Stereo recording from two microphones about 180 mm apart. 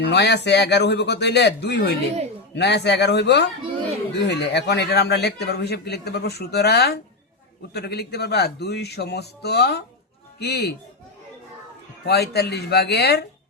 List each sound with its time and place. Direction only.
0.1 s a man's voice: 70° left (ahead or behind)
12.0 s a man's voice: 65° left (ahead or behind)